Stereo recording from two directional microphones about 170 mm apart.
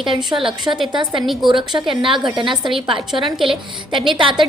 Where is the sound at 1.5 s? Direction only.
30° right (ahead or behind).